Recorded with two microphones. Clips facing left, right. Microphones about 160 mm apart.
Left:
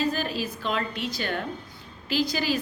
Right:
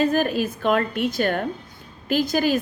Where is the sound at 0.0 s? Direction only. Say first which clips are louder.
Right 7 dB; 55° right (ahead or behind).